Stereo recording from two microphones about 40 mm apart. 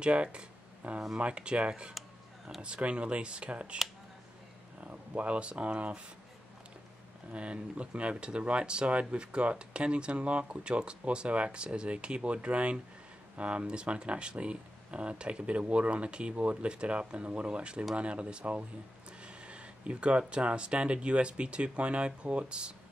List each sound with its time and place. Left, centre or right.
0.0 s speech: right
4.7 s speech: right
7.3 s speech: right
19.2 s speech: right